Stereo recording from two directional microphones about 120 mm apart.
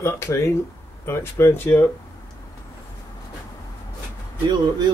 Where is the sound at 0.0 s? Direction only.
25° left (ahead or behind).